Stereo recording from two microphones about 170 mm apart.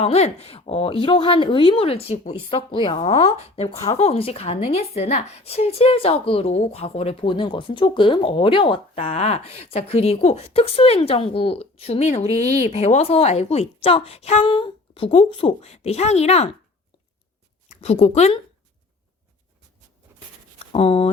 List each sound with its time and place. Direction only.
0.0 s a woman's voice: 35° left (ahead or behind)
17.7 s a woman's voice: 35° left (ahead or behind)
20.7 s a woman's voice: 35° left (ahead or behind)